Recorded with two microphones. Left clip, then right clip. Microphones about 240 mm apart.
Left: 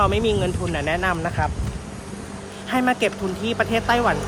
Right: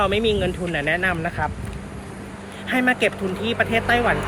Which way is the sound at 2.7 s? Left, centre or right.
Centre.